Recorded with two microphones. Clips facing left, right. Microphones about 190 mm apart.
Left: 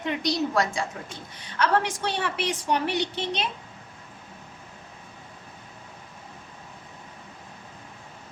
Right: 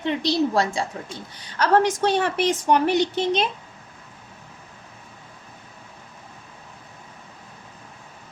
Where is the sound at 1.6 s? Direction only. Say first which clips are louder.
Right 6 dB; 40° right (ahead or behind).